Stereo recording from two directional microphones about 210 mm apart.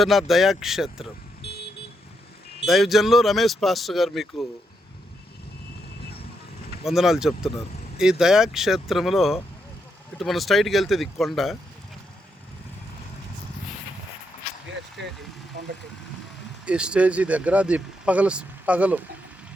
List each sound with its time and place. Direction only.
0.0 s speech: centre (ahead or behind)
1.4 s vehicle: 50° left (ahead or behind)
2.6 s speech: centre (ahead or behind)
6.8 s speech: centre (ahead or behind)
16.6 s speech: 5° right (ahead or behind)